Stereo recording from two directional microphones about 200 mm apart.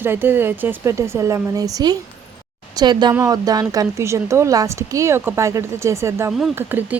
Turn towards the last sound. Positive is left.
turn(degrees=-10)  # may be behind; listen again after turning